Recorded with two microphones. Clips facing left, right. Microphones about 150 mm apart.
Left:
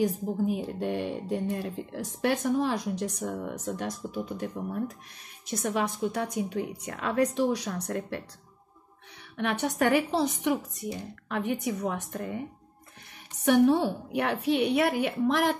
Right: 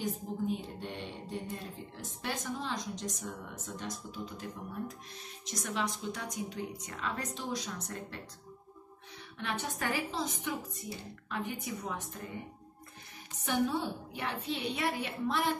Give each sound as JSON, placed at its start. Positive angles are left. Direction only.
{"t": 0.0, "sound": "speech", "side_deg": 65}
{"t": 9.4, "sound": "a woman's voice", "side_deg": 65}
{"t": 13.5, "sound": "a woman's voice", "side_deg": 65}